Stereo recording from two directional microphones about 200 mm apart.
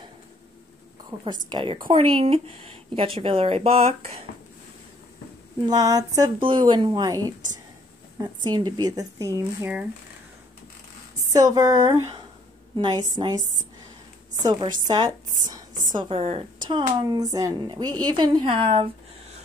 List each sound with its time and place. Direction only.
1.1 s a woman's voice: 10° right (ahead or behind)
1.5 s speech: 25° right (ahead or behind)
5.6 s speech: 20° right (ahead or behind)
11.3 s speech: 20° right (ahead or behind)
14.4 s speech: 20° right (ahead or behind)